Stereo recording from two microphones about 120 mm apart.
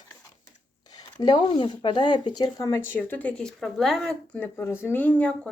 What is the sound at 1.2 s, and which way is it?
Speech, 40° left (ahead or behind).